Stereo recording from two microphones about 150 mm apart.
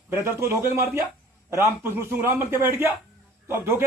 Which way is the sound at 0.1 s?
15° right (ahead or behind).